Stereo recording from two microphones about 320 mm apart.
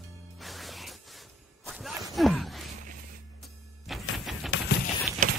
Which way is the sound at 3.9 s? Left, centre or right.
Centre.